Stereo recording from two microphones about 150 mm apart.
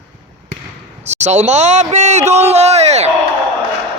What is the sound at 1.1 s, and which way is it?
Speech, 50° right (ahead or behind).